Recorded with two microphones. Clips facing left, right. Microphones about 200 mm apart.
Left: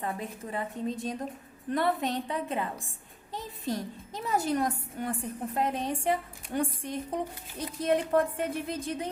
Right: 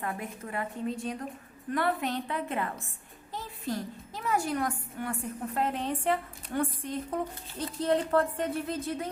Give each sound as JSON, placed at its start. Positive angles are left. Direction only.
{"t": 0.0, "sound": "a woman's voice", "side_deg": 25}